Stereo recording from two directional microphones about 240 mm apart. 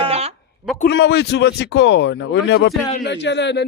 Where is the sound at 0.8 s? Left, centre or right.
Left.